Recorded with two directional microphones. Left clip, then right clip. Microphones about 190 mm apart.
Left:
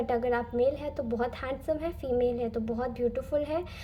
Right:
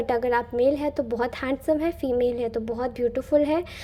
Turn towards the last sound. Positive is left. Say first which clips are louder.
# right 8 dB
turn(degrees=-35)  # may be behind; listen again after turning